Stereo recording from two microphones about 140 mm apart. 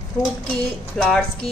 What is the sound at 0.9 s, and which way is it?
Speech, 5° left (ahead or behind).